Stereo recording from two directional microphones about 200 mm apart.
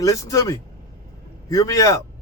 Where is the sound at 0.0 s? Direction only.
15° left (ahead or behind).